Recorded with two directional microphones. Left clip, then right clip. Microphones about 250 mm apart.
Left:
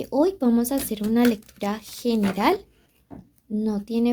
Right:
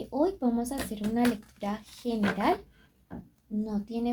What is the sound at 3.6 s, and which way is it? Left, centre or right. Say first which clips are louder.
Speech: left 8 dB; left.